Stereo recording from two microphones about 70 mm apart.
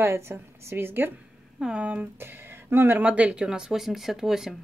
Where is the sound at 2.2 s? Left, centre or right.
Right.